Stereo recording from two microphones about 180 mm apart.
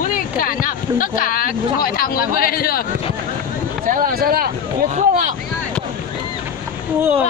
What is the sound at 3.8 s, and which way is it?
Speech, 55° right (ahead or behind).